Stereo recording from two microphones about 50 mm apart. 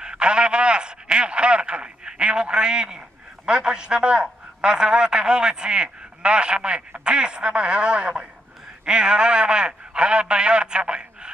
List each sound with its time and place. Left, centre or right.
0.0 s a man's voice: centre